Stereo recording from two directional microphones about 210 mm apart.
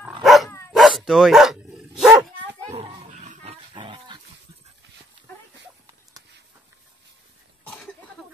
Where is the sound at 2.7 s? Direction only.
30° right (ahead or behind).